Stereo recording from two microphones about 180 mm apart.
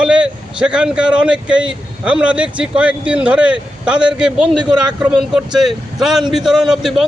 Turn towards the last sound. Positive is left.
turn(degrees=0)  # may be behind; listen again after turning